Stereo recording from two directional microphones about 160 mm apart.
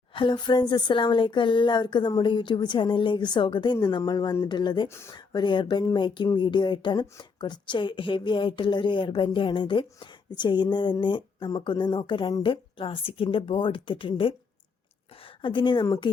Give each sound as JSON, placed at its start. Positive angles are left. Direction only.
{"t": 0.1, "sound": "speech", "side_deg": 30}
{"t": 15.4, "sound": "speech", "side_deg": 30}